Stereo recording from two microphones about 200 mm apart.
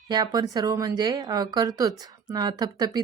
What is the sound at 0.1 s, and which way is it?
Speech, 20° right (ahead or behind).